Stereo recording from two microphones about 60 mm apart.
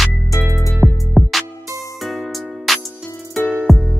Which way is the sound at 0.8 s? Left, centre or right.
Centre.